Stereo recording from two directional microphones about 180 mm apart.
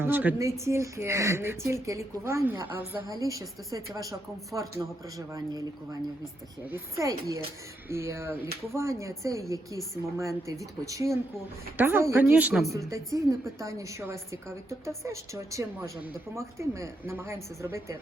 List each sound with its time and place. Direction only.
0.0 s a woman's voice: 10° right (ahead or behind)
6.7 s a woman's voice: 15° right (ahead or behind)
12.9 s a woman's voice: 20° right (ahead or behind)